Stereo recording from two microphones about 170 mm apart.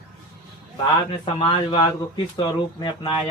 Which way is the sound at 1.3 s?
30° left (ahead or behind).